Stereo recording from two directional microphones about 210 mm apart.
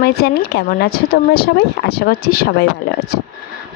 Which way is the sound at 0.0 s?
50° left (ahead or behind).